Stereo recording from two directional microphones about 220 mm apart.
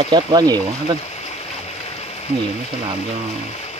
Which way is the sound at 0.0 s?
20° right (ahead or behind).